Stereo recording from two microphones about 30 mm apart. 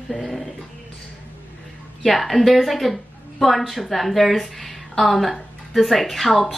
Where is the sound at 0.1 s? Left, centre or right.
Centre.